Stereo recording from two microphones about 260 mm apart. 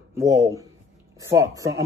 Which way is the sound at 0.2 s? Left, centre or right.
Centre.